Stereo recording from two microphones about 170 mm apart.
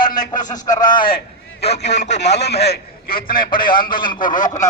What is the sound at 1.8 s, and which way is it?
Speech, 90° left.